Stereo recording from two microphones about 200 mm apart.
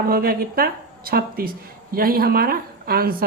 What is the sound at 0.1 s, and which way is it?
Speech, 50° right (ahead or behind).